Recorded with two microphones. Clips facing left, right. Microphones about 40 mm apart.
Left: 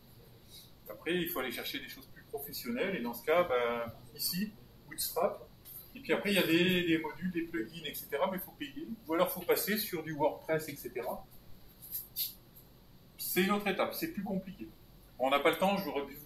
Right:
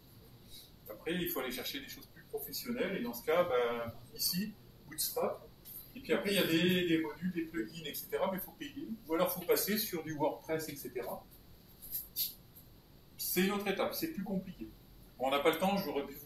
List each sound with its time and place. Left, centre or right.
0.8 s a man's voice: centre
7.1 s speech: centre
12.2 s a sound: centre
13.2 s a man's voice: centre